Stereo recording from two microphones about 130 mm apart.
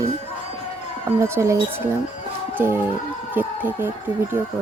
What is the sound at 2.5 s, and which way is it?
Music, 20° right (ahead or behind).